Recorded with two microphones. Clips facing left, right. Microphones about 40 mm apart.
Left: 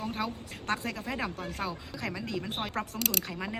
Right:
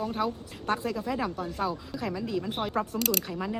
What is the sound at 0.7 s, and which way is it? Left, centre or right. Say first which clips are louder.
Speech: right 4 dB; left.